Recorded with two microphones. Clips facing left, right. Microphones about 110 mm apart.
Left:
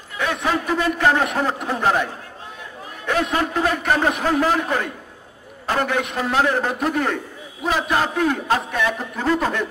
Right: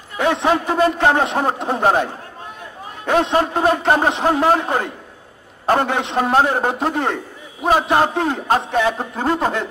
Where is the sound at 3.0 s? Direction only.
30° right (ahead or behind).